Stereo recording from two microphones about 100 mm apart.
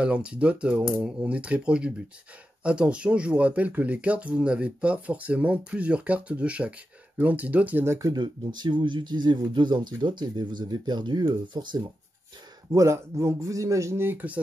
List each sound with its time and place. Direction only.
0.0 s speech: 10° right (ahead or behind)
8.1 s speech: 45° right (ahead or behind)
12.7 s speech: 30° right (ahead or behind)